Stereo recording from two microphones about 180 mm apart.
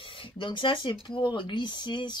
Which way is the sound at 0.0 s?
30° left (ahead or behind).